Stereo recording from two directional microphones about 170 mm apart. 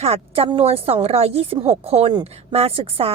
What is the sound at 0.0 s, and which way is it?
A woman's voice, 35° right (ahead or behind).